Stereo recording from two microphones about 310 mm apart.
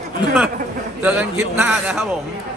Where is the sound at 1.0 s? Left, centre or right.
Centre.